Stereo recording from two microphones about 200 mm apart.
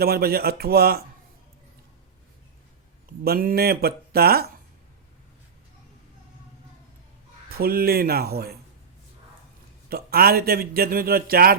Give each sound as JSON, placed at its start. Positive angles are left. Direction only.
{"t": 0.0, "sound": "a man's voice", "side_deg": -50}
{"t": 3.2, "sound": "a man's voice", "side_deg": -50}
{"t": 7.5, "sound": "a man's voice", "side_deg": -50}
{"t": 9.9, "sound": "a man's voice", "side_deg": -50}